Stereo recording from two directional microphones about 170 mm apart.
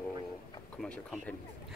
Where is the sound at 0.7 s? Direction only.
5° left (ahead or behind).